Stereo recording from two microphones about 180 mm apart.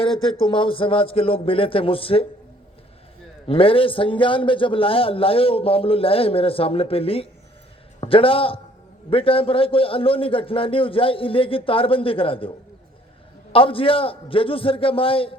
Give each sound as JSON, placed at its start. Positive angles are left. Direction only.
{"t": 0.0, "sound": "a man's voice", "side_deg": 30}
{"t": 3.4, "sound": "a man's voice", "side_deg": 30}
{"t": 13.5, "sound": "a man's voice", "side_deg": 30}